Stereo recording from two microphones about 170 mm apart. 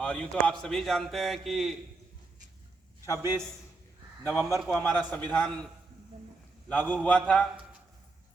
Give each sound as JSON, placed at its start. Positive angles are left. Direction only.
{"t": 0.0, "sound": "a man's voice", "side_deg": 5}
{"t": 3.2, "sound": "a man's voice", "side_deg": -15}
{"t": 4.4, "sound": "a man's voice", "side_deg": 15}
{"t": 6.7, "sound": "a man's voice", "side_deg": 10}